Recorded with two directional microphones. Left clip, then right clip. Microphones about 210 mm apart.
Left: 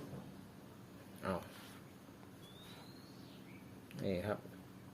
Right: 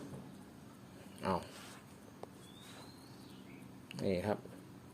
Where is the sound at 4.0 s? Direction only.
25° right (ahead or behind).